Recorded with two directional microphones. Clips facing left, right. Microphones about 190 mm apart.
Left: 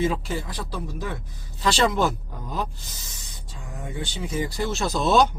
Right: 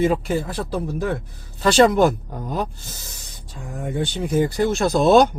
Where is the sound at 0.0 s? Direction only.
55° right (ahead or behind).